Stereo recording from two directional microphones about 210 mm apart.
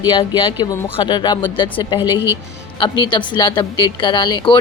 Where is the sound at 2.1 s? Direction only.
10° right (ahead or behind).